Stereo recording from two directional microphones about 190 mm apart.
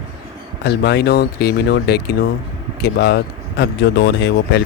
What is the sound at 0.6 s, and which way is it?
Speech, 60° left (ahead or behind).